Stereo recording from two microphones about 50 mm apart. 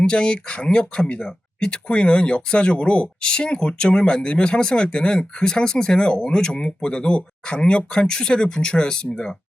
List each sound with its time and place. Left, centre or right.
0.0 s speech: centre